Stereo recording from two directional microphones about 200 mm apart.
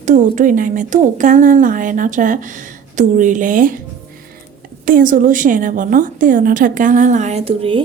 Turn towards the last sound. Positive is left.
turn(degrees=-25)  # may be behind; listen again after turning